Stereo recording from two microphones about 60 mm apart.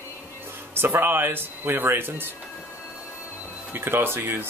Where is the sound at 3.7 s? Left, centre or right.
Right.